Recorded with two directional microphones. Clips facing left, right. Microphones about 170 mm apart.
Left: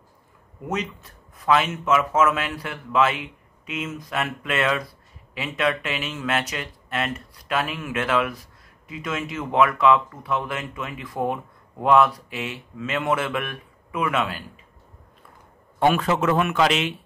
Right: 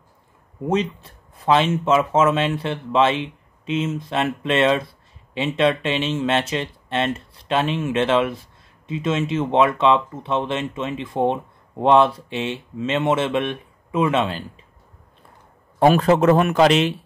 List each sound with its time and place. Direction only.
0.6 s speech: 30° right (ahead or behind)
15.8 s a man's voice: 35° right (ahead or behind)